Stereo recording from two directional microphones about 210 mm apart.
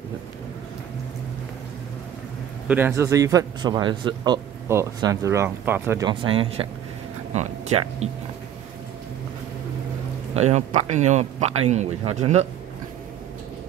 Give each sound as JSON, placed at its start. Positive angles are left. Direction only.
{"t": 2.7, "sound": "speech", "side_deg": -10}
{"t": 10.3, "sound": "speech", "side_deg": -35}